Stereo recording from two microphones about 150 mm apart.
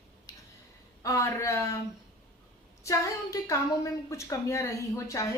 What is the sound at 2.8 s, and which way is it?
Speech, 20° left (ahead or behind).